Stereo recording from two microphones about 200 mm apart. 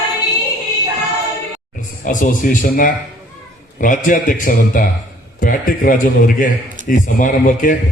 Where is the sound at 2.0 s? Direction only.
40° left (ahead or behind).